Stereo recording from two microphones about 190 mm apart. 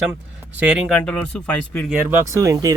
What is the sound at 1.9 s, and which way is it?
Speech, 15° right (ahead or behind).